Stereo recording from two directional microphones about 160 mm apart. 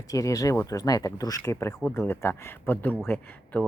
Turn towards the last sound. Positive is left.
turn(degrees=10)  # may be behind; listen again after turning